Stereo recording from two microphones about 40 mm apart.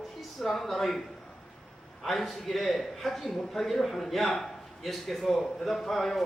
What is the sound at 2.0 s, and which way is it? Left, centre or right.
A man's voice, centre.